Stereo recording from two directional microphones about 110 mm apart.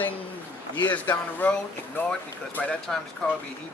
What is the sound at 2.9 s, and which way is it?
Speech, 5° left (ahead or behind).